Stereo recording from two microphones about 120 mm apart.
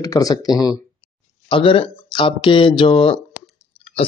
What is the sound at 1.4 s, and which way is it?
Speech, 45° left (ahead or behind).